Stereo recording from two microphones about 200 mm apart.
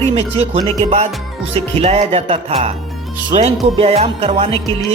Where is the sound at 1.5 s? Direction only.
30° right (ahead or behind).